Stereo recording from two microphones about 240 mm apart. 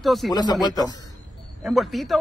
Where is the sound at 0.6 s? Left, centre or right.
Centre.